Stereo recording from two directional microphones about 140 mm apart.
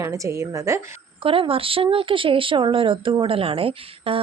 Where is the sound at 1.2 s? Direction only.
40° right (ahead or behind).